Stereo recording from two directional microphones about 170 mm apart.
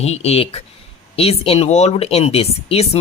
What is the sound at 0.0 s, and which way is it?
Speech, 40° left (ahead or behind).